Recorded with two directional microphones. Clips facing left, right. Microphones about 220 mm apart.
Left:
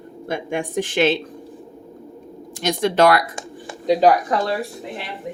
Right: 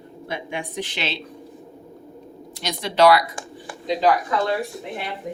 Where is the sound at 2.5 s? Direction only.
50° left (ahead or behind).